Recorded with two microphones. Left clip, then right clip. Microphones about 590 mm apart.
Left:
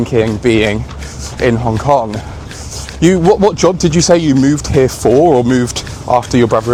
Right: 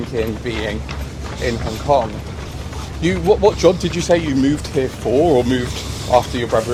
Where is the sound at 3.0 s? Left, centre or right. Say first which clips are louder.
Left 5 dB; left.